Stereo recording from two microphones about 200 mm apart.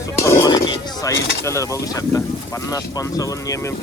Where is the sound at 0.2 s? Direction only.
15° left (ahead or behind).